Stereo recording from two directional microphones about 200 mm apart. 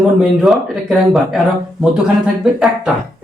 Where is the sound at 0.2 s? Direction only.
Centre (ahead or behind).